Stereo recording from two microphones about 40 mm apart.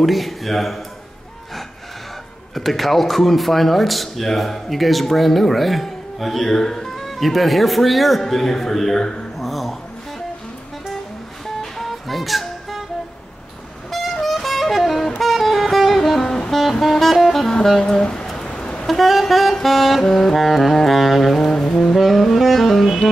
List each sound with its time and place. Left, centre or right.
0.0 s speech: centre
2.5 s speech: centre
9.4 s dog: centre
11.8 s music: centre
14.2 s music: centre
16.8 s saxophone: centre
17.7 s speech: centre
18.3 s music: centre
18.9 s music: centre
19.6 s speech: centre
21.5 s music: centre
21.9 s saxophone: centre